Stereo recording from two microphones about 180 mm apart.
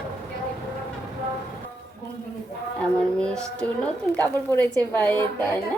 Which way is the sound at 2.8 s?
5° left (ahead or behind).